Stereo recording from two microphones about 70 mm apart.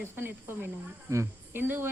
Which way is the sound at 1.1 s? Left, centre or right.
Right.